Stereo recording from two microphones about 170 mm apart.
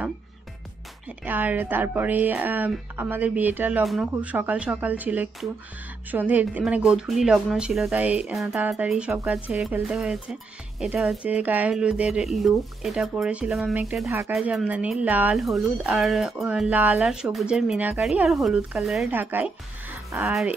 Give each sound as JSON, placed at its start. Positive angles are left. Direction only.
{"t": 1.0, "sound": "speech", "side_deg": -10}
{"t": 14.0, "sound": "speech", "side_deg": -15}
{"t": 14.3, "sound": "speech", "side_deg": -5}